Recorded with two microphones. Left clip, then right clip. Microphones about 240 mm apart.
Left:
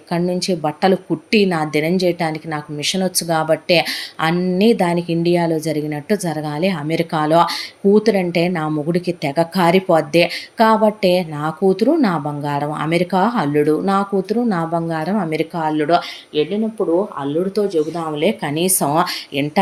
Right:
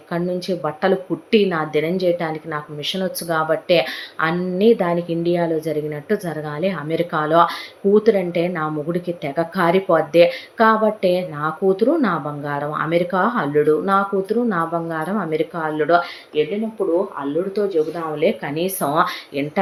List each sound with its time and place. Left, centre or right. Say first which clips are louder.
0.1 s a woman's voice: left 3 dB; left
17.5 s a woman's voice: even; left